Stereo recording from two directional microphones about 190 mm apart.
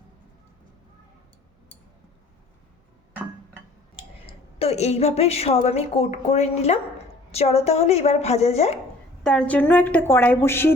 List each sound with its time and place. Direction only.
4.3 s a woman's voice: 30° left (ahead or behind)
9.2 s a woman's voice: 5° left (ahead or behind)